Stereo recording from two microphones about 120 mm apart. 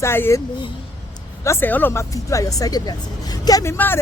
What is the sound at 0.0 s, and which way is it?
Speech, 20° left (ahead or behind).